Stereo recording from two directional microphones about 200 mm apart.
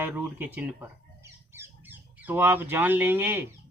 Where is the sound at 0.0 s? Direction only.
10° right (ahead or behind).